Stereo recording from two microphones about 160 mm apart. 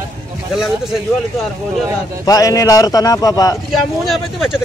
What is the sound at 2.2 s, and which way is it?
A man's voice, 20° left (ahead or behind).